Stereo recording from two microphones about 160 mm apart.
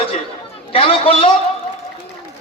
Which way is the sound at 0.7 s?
35° left (ahead or behind).